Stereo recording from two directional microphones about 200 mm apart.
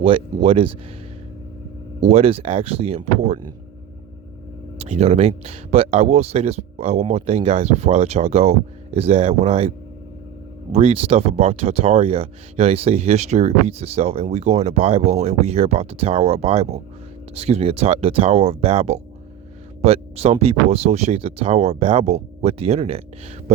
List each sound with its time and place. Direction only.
0.0 s speech: 30° right (ahead or behind)
2.0 s speech: 30° right (ahead or behind)
4.8 s speech: 30° right (ahead or behind)